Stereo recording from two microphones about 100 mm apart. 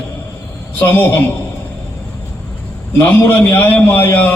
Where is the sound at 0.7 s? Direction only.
20° left (ahead or behind).